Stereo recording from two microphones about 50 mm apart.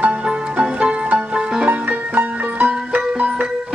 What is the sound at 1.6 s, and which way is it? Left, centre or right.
Music, right.